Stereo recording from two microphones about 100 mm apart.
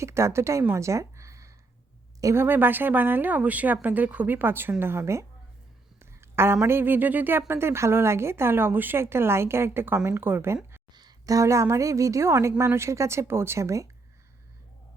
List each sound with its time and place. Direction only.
0.0 s speech: 30° right (ahead or behind)
0.6 s a sound: 25° right (ahead or behind)
2.2 s speech: 25° right (ahead or behind)
10.9 s speech: 40° right (ahead or behind)